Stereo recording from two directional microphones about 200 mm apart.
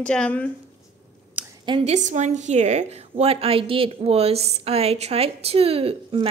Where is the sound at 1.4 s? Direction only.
5° right (ahead or behind).